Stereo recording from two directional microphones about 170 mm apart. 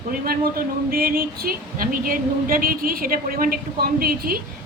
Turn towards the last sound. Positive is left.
turn(degrees=-60)  # may be behind; listen again after turning